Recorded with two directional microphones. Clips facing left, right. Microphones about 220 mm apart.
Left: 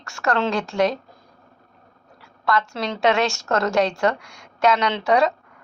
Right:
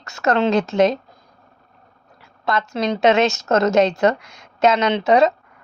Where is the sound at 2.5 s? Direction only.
20° right (ahead or behind).